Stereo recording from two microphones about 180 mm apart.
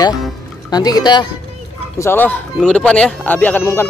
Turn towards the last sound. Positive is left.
turn(degrees=10)  # may be behind; listen again after turning